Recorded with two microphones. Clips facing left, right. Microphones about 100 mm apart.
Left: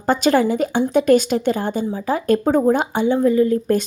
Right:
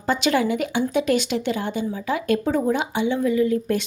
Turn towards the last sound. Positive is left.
turn(degrees=40)  # may be behind; listen again after turning